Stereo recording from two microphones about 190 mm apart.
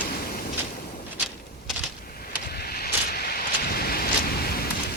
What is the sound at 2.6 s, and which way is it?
Vehicle, 55° left (ahead or behind).